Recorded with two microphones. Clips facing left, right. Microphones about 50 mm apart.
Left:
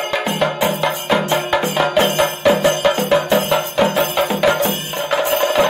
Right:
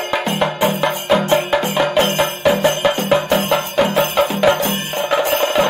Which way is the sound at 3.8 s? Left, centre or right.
Centre.